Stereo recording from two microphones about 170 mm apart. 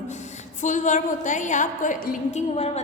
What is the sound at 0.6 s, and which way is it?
A woman's voice, 45° left (ahead or behind).